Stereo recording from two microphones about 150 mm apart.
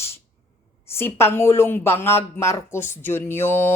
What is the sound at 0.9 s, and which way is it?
Speech, 15° left (ahead or behind).